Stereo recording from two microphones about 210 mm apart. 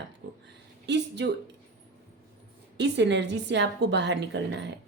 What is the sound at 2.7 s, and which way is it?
A woman's voice, 55° right (ahead or behind).